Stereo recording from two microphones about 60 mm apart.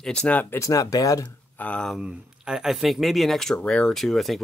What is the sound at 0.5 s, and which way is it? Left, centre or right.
Speech, left.